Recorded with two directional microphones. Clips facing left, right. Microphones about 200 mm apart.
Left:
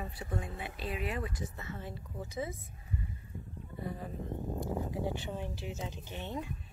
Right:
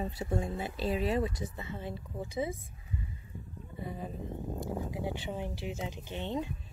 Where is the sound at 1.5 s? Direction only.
15° right (ahead or behind).